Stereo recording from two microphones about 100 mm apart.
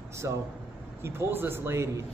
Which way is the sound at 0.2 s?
30° right (ahead or behind).